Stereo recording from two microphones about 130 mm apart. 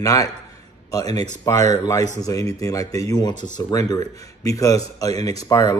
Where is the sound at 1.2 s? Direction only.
25° left (ahead or behind).